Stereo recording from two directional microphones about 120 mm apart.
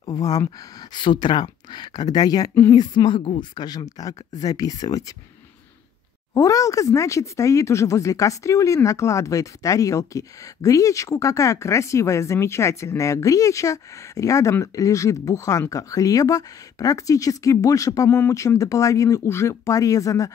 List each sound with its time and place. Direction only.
0.0 s a woman's voice: 35° left (ahead or behind)
6.3 s speech: 30° left (ahead or behind)